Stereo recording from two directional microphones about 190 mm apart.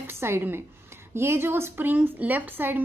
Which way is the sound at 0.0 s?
10° right (ahead or behind).